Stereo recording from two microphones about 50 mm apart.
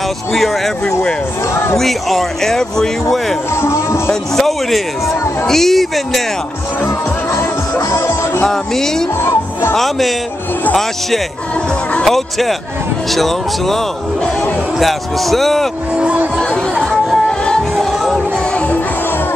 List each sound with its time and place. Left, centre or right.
0.3 s speech: centre
8.5 s speech: centre
9.2 s speech: left
9.8 s speech: centre
12.0 s speech: centre
14.8 s speech: centre
16.9 s music: centre